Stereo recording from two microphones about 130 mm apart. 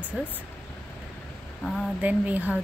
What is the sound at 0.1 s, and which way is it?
Speech, 10° right (ahead or behind).